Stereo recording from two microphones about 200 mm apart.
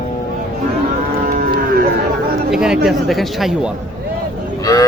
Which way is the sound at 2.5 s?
5° right (ahead or behind).